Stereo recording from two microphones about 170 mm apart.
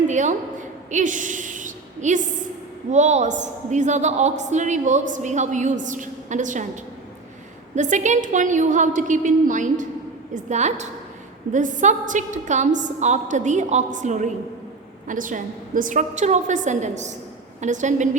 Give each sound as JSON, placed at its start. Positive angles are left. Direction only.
{"t": 0.1, "sound": "a woman's voice", "side_deg": -45}
{"t": 0.9, "sound": "a sound", "side_deg": -50}
{"t": 2.9, "sound": "a woman's voice", "side_deg": -45}
{"t": 7.8, "sound": "a woman's voice", "side_deg": -45}